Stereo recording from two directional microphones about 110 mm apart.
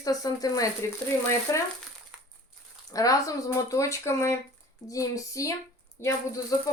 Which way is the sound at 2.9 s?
30° left (ahead or behind).